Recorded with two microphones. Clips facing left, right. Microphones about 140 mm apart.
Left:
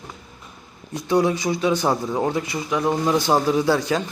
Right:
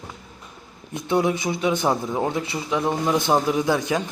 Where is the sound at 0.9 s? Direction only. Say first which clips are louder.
Left 2 dB; 25° right (ahead or behind).